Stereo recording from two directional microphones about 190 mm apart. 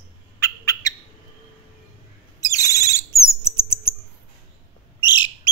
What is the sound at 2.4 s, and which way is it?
Chirp, 15° left (ahead or behind).